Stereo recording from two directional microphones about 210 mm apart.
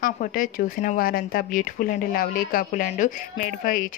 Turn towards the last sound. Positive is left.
turn(degrees=40)  # may be behind; listen again after turning